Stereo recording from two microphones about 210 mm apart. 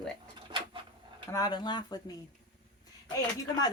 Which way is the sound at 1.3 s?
20° left (ahead or behind).